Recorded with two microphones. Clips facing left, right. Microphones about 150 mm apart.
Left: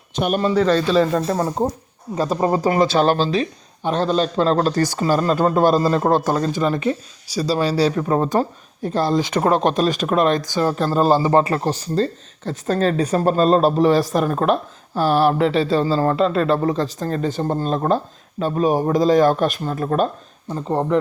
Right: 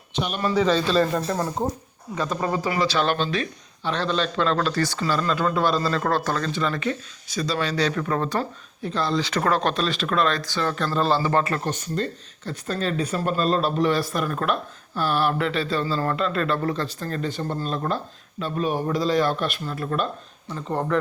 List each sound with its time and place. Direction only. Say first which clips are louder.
0.1 s speech: left 7 dB; 50° left (ahead or behind)
0.7 s speech: left 4 dB; 10° left (ahead or behind)
1.1 s speech: left 5 dB; 50° left (ahead or behind)
2.1 s speech: left 6 dB; 35° left (ahead or behind)
3.8 s speech: left 6 dB; 45° left (ahead or behind)
6.0 s speech: left 6 dB; 25° left (ahead or behind)
8.3 s speech: left 7 dB; 45° left (ahead or behind)
9.2 s speech: left 5 dB; 20° left (ahead or behind)
9.7 s speech: left 6 dB; 45° left (ahead or behind)
10.1 s speech: left 4 dB; 15° left (ahead or behind)
10.7 s speech: left 6 dB; 40° left (ahead or behind)
11.2 s speech: left 6 dB; 20° left (ahead or behind)